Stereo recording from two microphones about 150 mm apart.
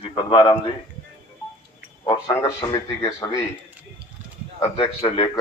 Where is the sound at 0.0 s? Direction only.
35° left (ahead or behind).